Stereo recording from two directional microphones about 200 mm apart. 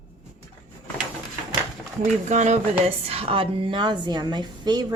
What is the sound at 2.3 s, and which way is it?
A woman's voice, 35° right (ahead or behind).